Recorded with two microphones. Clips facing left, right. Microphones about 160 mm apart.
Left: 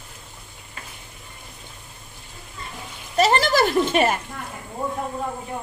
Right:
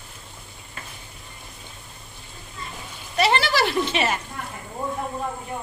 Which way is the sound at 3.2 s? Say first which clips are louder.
Left 3 dB; 40° left (ahead or behind).